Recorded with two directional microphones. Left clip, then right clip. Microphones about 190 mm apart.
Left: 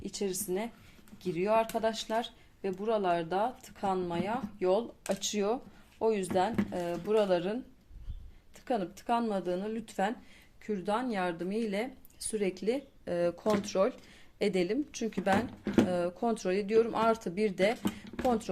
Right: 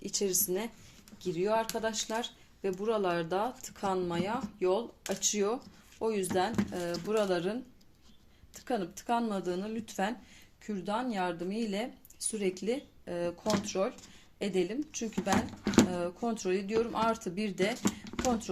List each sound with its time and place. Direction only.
0.0 s speech: 5° right (ahead or behind)
1.2 s speech: 5° left (ahead or behind)
4.6 s speech: 10° left (ahead or behind)
13.1 s speech: 25° left (ahead or behind)